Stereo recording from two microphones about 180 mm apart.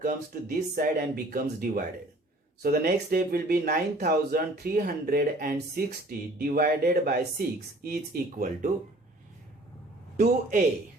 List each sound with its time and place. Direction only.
0.8 s speech: 55° right (ahead or behind)
10.2 s speech: 45° right (ahead or behind)